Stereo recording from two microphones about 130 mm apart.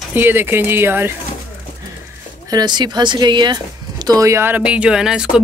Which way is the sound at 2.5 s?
35° right (ahead or behind).